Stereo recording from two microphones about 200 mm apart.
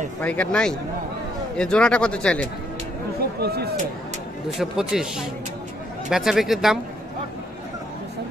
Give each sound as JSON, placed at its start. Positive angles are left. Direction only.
{"t": 0.2, "sound": "speech", "side_deg": 5}
{"t": 3.3, "sound": "speech", "side_deg": -55}
{"t": 4.6, "sound": "speech", "side_deg": 0}